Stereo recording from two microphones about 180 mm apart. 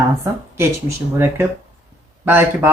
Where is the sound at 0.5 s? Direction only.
15° right (ahead or behind).